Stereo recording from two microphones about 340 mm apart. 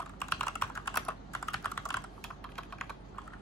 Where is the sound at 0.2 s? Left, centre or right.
Centre.